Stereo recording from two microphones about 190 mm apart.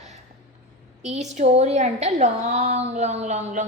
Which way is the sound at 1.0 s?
35° right (ahead or behind).